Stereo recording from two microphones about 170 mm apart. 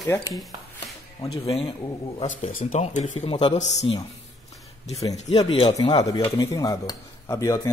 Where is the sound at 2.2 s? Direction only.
45° left (ahead or behind).